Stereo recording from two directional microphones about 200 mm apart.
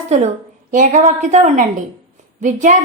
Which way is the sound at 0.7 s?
40° right (ahead or behind).